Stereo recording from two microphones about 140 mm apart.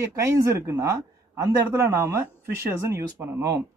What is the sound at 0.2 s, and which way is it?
A man's voice, 20° right (ahead or behind).